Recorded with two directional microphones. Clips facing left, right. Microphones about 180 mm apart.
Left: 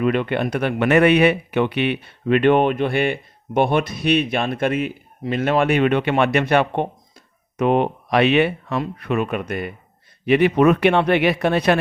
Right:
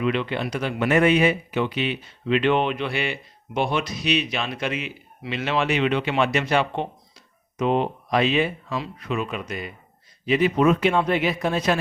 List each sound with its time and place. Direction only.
0.0 s speech: 50° left (ahead or behind); by 11.8 s 65° left (ahead or behind)